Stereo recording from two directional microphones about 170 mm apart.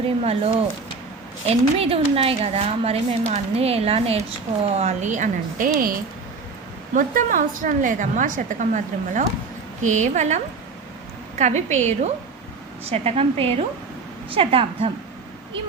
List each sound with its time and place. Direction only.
1.5 s a woman's voice: 35° right (ahead or behind)
6.9 s a woman's voice: 50° right (ahead or behind); by 14.8 s 35° right (ahead or behind)